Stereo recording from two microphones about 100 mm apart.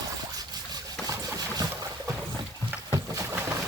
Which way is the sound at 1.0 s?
40° right (ahead or behind).